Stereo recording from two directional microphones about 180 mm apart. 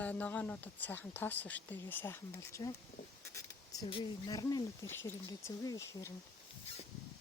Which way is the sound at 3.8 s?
30° left (ahead or behind).